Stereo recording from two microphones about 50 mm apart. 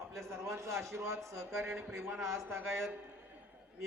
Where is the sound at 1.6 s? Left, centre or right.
Right.